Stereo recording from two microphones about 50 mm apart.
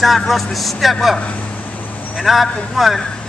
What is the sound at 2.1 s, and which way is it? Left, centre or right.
Speech, centre.